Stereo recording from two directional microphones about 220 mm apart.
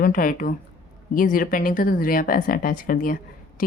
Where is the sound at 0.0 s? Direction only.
40° left (ahead or behind).